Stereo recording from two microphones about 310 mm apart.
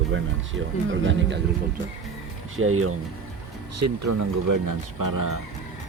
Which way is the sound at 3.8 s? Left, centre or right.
Right.